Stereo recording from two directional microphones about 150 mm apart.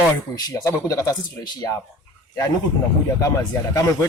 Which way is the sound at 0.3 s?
25° left (ahead or behind).